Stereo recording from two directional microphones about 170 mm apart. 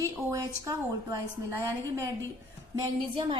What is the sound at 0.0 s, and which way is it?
Speech, 20° right (ahead or behind).